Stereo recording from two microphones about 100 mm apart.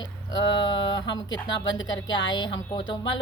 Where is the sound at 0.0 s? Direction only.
45° left (ahead or behind).